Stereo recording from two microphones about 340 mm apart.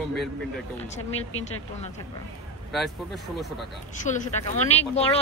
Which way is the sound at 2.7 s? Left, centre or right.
Centre.